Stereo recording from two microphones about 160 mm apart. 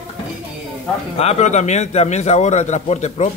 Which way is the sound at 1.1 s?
40° left (ahead or behind).